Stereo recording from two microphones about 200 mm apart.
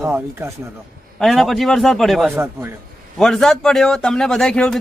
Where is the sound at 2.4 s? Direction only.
10° right (ahead or behind).